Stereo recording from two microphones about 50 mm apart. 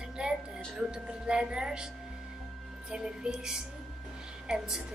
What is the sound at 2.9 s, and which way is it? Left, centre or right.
A woman's voice, centre.